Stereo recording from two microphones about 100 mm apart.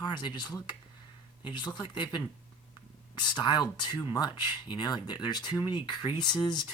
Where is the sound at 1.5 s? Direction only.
50° left (ahead or behind).